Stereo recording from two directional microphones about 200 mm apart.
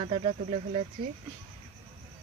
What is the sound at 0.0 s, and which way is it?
Speech, 30° right (ahead or behind).